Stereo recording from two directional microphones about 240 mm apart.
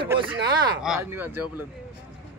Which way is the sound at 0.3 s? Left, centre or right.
Centre.